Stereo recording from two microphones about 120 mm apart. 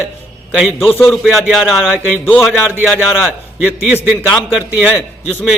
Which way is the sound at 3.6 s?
15° right (ahead or behind).